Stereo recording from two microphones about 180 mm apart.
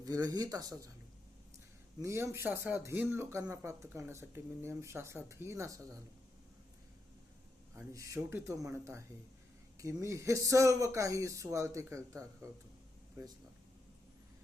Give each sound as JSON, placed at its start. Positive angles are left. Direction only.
{"t": 0.0, "sound": "speech", "side_deg": -20}
{"t": 2.0, "sound": "speech", "side_deg": -15}
{"t": 7.8, "sound": "speech", "side_deg": -15}